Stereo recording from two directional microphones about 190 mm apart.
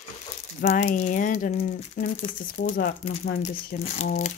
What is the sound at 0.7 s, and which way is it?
A woman's voice, 35° left (ahead or behind).